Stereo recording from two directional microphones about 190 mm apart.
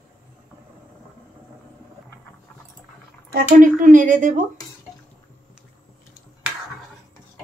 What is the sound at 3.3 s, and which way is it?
Speech, 45° right (ahead or behind).